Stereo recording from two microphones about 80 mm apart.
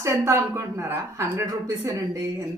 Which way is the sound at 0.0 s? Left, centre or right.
Right.